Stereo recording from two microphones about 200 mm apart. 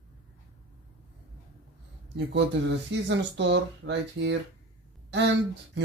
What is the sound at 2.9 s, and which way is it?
Speech, 60° right (ahead or behind).